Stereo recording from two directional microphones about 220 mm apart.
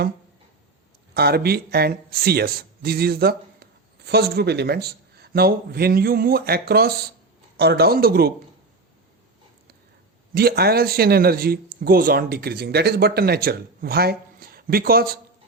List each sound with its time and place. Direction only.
1.1 s speech: 45° right (ahead or behind)
10.3 s speech: 45° right (ahead or behind)